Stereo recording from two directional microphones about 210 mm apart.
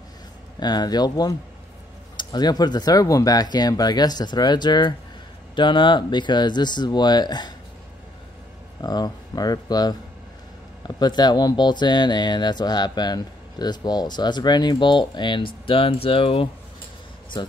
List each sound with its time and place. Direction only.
0.6 s speech: 20° left (ahead or behind)
8.8 s speech: 20° left (ahead or behind)